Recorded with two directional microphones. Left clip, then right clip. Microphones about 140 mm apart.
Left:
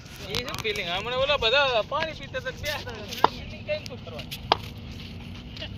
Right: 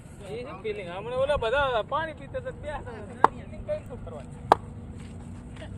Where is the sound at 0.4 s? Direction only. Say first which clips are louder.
Left 4 dB; 25° left (ahead or behind).